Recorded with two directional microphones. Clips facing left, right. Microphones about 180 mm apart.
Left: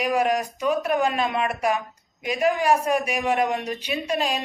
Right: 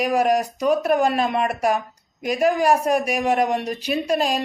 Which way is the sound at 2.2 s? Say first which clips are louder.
Right 3 dB; 40° right (ahead or behind).